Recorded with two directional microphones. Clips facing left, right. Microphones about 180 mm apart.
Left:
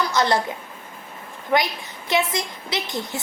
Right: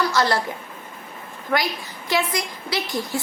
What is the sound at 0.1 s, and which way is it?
Speech, 20° left (ahead or behind).